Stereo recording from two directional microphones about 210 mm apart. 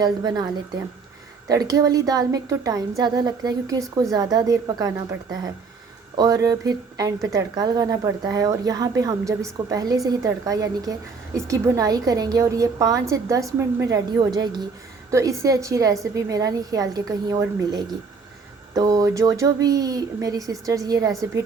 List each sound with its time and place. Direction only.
0.0 s a woman's voice: 20° right (ahead or behind)
1.5 s a woman's voice: 15° right (ahead or behind)
6.1 s a woman's voice: 15° right (ahead or behind)